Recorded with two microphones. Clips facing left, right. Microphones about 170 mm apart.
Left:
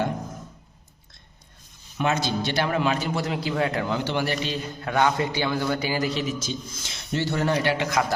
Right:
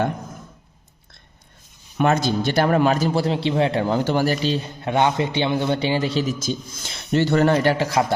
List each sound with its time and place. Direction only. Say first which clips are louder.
2.0 s a man's voice: right 5 dB; 50° right (ahead or behind); by 6.3 s 30° right (ahead or behind)
6.4 s a man's voice: right 5 dB; 50° right (ahead or behind)
7.6 s a man's voice: right 4 dB; 40° right (ahead or behind)